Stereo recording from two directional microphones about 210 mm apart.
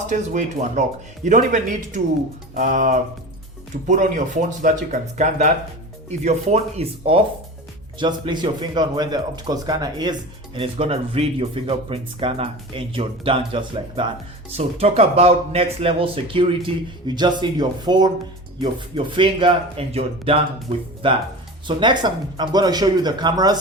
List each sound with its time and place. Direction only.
0.1 s speech: 35° right (ahead or behind); by 23.6 s 20° right (ahead or behind)